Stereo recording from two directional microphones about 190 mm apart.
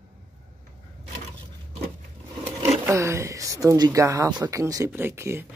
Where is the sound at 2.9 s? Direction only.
15° right (ahead or behind).